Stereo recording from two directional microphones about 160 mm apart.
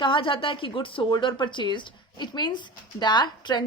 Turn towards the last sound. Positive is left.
turn(degrees=25)  # may be behind; listen again after turning